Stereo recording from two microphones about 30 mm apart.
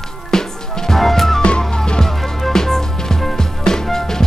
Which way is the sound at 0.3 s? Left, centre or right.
Centre.